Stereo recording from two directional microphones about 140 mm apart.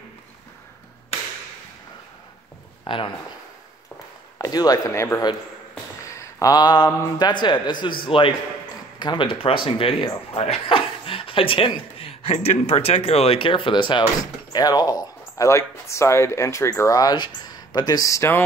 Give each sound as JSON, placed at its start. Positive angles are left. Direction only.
{"t": 2.8, "sound": "a man's voice", "side_deg": 35}
{"t": 4.4, "sound": "speech", "side_deg": 25}
{"t": 6.1, "sound": "a sound", "side_deg": 25}
{"t": 7.2, "sound": "speech", "side_deg": 30}